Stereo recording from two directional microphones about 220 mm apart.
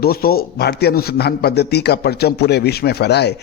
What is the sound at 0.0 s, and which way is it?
A man's voice, 45° left (ahead or behind).